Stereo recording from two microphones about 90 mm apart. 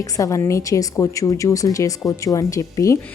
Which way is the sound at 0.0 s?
40° left (ahead or behind).